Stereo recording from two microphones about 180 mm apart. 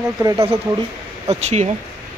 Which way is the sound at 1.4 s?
40° right (ahead or behind).